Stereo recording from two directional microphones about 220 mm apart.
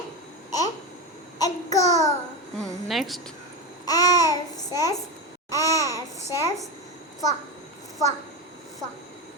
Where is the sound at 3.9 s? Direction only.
15° left (ahead or behind).